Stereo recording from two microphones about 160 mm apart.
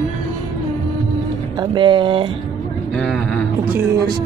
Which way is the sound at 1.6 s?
30° right (ahead or behind).